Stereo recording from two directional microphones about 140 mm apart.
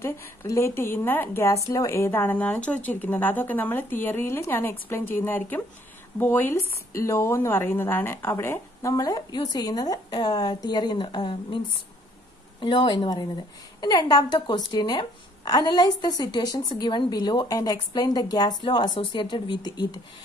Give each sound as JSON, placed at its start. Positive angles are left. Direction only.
{"t": 0.0, "sound": "a woman's voice", "side_deg": 20}